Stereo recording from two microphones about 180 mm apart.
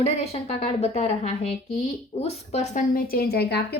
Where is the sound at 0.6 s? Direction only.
35° left (ahead or behind).